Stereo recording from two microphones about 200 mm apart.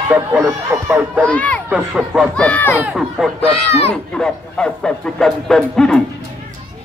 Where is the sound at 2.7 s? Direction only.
5° right (ahead or behind).